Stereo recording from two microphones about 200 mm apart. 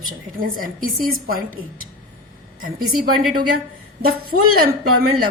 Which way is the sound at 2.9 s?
90° right.